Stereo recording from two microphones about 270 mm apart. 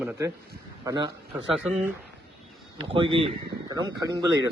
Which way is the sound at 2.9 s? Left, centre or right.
Centre.